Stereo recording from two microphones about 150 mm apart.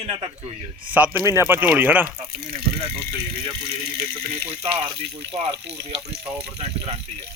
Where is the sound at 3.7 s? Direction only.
90° right.